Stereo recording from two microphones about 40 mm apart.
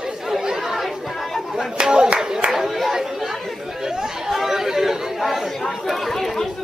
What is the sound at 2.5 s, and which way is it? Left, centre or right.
Chatter, centre.